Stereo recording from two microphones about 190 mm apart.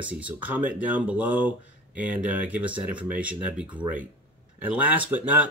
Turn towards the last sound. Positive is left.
turn(degrees=-10)  # may be behind; listen again after turning